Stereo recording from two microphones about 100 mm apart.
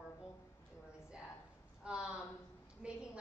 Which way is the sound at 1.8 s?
5° right (ahead or behind).